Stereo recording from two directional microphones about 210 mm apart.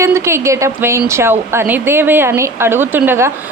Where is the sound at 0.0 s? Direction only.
15° right (ahead or behind).